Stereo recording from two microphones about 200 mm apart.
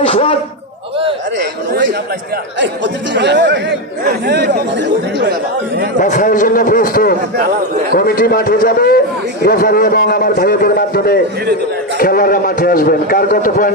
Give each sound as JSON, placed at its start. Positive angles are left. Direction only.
{"t": 0.0, "sound": "a man's voice", "side_deg": 30}
{"t": 1.7, "sound": "speech", "side_deg": -55}
{"t": 6.0, "sound": "a man's voice", "side_deg": 40}